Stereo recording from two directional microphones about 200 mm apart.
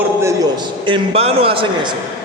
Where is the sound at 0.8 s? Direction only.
25° right (ahead or behind).